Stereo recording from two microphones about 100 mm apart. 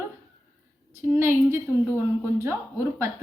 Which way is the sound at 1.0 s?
25° right (ahead or behind).